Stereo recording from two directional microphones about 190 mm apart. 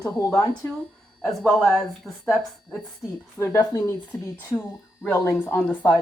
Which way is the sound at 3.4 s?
20° left (ahead or behind).